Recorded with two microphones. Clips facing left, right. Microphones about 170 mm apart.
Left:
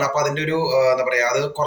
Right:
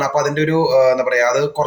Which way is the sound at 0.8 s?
55° right (ahead or behind).